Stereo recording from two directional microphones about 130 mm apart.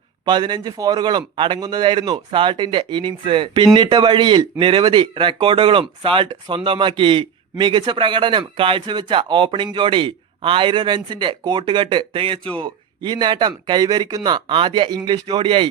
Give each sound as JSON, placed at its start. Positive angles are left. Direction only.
{"t": 0.3, "sound": "a man's voice", "side_deg": -35}